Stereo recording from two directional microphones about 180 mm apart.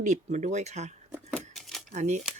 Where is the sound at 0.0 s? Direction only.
40° right (ahead or behind).